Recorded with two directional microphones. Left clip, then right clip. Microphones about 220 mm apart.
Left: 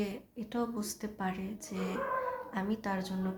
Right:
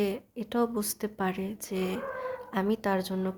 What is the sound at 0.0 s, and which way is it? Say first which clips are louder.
Speech: right 8 dB; 50° right (ahead or behind).